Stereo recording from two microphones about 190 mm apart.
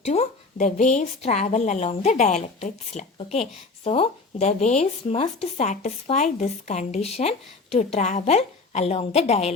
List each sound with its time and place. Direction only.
0.0 s speech: 35° left (ahead or behind)